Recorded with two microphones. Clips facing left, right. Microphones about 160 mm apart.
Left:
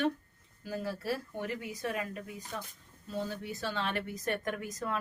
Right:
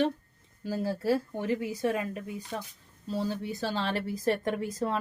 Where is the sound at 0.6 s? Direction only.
30° right (ahead or behind).